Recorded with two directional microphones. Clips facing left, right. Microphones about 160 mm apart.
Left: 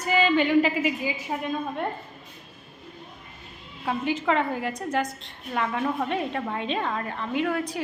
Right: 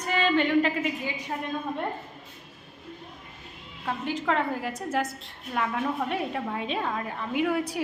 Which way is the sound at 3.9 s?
Centre (ahead or behind).